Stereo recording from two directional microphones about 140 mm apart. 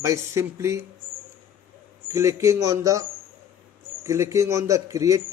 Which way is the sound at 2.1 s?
20° right (ahead or behind).